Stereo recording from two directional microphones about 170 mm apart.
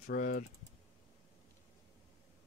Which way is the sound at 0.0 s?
55° left (ahead or behind).